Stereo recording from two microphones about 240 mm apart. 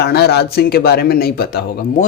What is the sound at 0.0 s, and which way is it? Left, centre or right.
Speech, left.